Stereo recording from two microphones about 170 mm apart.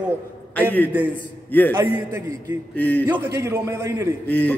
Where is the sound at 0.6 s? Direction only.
10° left (ahead or behind).